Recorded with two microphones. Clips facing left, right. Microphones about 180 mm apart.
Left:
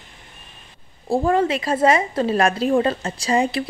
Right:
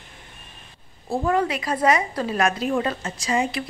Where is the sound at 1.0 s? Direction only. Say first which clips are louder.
Left 4 dB; 30° left (ahead or behind).